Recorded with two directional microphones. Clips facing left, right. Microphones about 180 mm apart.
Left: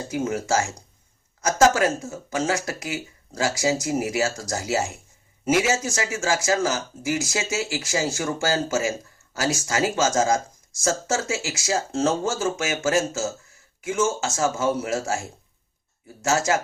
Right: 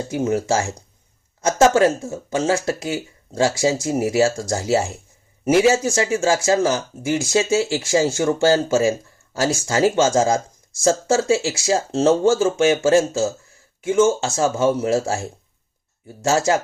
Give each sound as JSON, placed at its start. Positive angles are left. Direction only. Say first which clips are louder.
{"t": 0.1, "sound": "speech", "louder": "right 3 dB", "side_deg": -30}
{"t": 16.2, "sound": "speech", "louder": "right 4 dB", "side_deg": -30}